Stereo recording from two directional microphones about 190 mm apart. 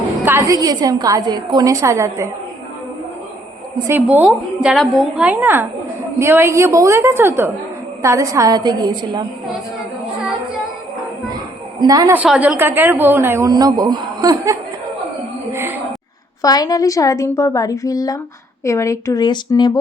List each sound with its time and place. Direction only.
0.3 s a woman's voice: 15° right (ahead or behind)
3.8 s a woman's voice: 10° right (ahead or behind)
11.8 s a woman's voice: 20° right (ahead or behind)
15.5 s music: 10° right (ahead or behind)
16.4 s a woman's voice: 20° left (ahead or behind)